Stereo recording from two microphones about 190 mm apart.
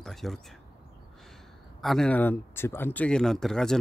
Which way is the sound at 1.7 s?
Centre (ahead or behind).